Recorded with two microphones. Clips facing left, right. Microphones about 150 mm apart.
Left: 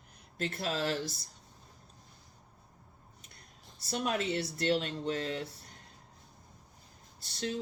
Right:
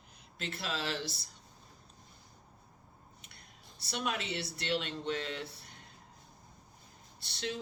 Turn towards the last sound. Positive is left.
turn(degrees=40)  # may be behind; listen again after turning